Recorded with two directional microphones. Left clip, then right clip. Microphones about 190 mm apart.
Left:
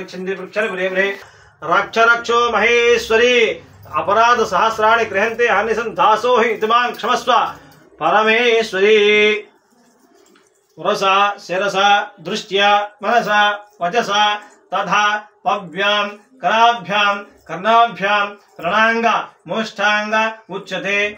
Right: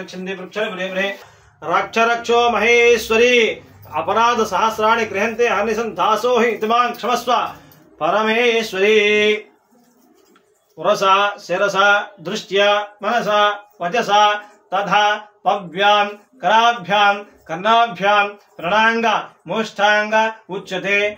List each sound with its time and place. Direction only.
1.7 s speech: 10° right (ahead or behind)
10.8 s speech: 10° right (ahead or behind)